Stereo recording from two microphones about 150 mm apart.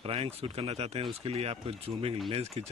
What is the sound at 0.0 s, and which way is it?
Speech, 40° right (ahead or behind).